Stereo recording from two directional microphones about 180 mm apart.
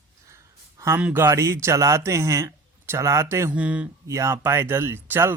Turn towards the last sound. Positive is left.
turn(degrees=-10)  # may be behind; listen again after turning